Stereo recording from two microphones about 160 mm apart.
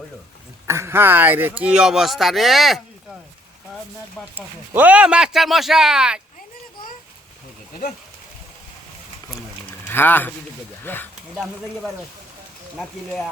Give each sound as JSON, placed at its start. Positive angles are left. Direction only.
{"t": 0.7, "sound": "speech", "side_deg": -15}
{"t": 4.4, "sound": "speech", "side_deg": -10}
{"t": 7.7, "sound": "speech", "side_deg": 65}
{"t": 9.9, "sound": "speech", "side_deg": 15}